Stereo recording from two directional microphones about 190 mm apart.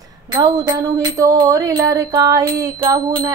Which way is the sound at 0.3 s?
20° right (ahead or behind).